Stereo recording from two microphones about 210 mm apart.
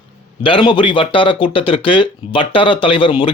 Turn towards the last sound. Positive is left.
turn(degrees=25)  # may be behind; listen again after turning